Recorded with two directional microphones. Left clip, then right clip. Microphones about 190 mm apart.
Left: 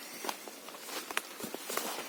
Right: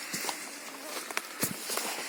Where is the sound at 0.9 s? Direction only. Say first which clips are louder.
Right 1 dB; 50° right (ahead or behind).